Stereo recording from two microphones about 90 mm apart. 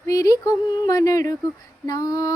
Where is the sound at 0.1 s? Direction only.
40° left (ahead or behind).